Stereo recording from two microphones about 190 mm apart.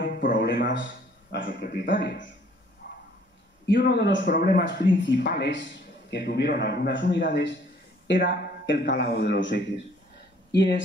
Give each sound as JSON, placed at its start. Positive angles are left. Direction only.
{"t": 0.0, "sound": "a man's voice", "side_deg": 60}
{"t": 1.5, "sound": "a man's voice", "side_deg": 50}
{"t": 2.8, "sound": "a sound", "side_deg": 60}
{"t": 3.6, "sound": "a man's voice", "side_deg": 65}
{"t": 4.3, "sound": "a man's voice", "side_deg": 50}